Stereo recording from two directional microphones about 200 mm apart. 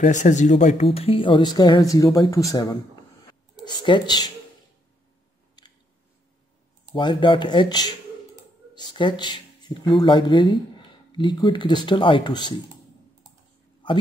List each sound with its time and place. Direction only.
0.0 s speech: 35° left (ahead or behind); by 4.3 s 20° left (ahead or behind)
7.0 s speech: 25° left (ahead or behind)